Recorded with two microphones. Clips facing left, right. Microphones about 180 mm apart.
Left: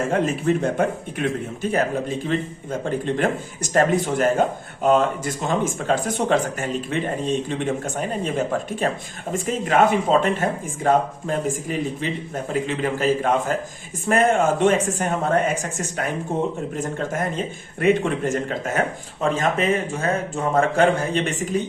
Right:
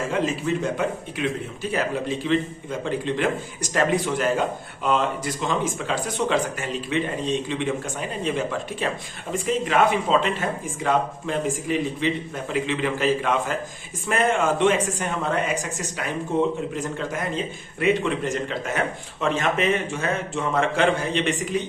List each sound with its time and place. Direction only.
0.1 s speech: 55° left (ahead or behind)